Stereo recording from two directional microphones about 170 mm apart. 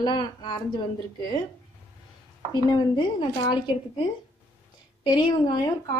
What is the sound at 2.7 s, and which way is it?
Speech, 30° left (ahead or behind).